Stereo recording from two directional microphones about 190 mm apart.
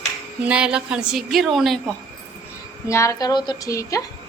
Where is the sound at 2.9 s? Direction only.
15° left (ahead or behind).